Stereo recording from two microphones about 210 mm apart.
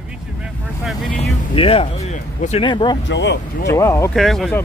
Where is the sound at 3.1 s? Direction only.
55° left (ahead or behind).